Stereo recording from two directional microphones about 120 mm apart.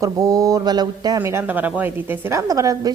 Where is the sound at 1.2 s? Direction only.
15° right (ahead or behind).